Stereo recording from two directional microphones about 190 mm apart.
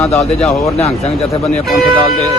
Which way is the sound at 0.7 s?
35° left (ahead or behind).